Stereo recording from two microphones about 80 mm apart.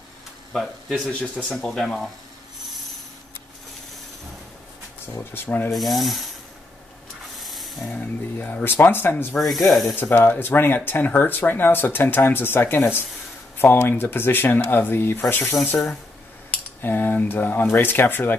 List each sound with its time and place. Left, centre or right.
0.6 s rub: centre
1.2 s speech: centre
5.0 s speech: left
5.7 s rub: centre
7.3 s a sound: centre
7.9 s speech: centre
9.3 s rub: centre
9.9 s speech: left